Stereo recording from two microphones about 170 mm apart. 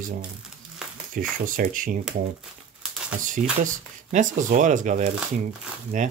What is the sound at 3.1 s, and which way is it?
Speech, 50° right (ahead or behind).